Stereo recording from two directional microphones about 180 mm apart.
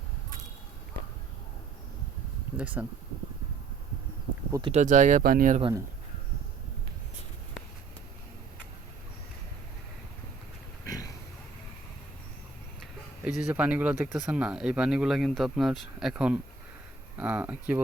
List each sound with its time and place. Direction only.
2.6 s speech: 10° right (ahead or behind)
4.7 s speech: 40° right (ahead or behind)
10.8 s a sound: 20° left (ahead or behind)
12.8 s speech: 5° right (ahead or behind)